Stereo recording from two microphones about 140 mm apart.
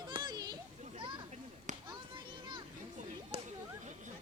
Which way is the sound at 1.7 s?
60° right (ahead or behind).